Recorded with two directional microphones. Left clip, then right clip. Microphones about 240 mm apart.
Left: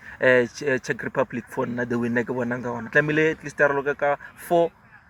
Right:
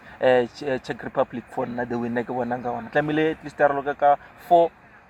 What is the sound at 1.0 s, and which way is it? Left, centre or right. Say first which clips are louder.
Speech: even; centre.